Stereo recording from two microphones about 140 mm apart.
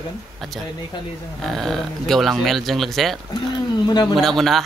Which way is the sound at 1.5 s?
Centre (ahead or behind).